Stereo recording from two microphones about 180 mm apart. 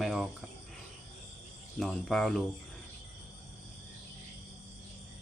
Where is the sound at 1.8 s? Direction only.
Centre (ahead or behind).